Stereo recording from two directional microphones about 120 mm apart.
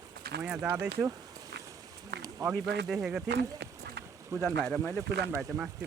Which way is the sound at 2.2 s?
30° right (ahead or behind).